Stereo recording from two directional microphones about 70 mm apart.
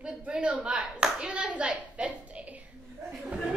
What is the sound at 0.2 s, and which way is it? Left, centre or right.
Clapping, centre.